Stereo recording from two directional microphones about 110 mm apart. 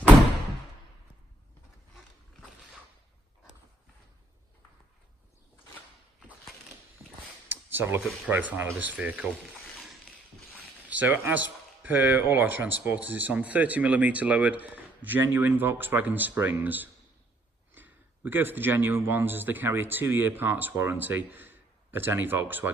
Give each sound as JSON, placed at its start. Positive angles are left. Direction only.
{"t": 7.0, "sound": "a sound", "side_deg": -20}
{"t": 8.3, "sound": "speech", "side_deg": -15}
{"t": 10.8, "sound": "speech", "side_deg": -15}